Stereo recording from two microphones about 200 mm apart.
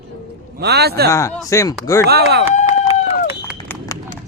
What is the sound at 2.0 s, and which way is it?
Speech, 55° right (ahead or behind).